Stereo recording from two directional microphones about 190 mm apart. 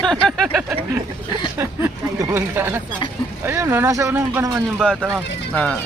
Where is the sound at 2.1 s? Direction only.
15° right (ahead or behind).